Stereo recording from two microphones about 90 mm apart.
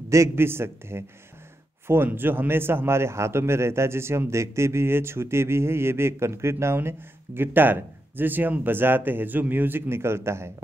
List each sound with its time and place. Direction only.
0.1 s a man's voice: 30° right (ahead or behind)